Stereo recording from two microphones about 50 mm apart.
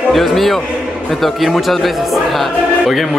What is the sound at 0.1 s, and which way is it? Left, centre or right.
A man's voice, centre.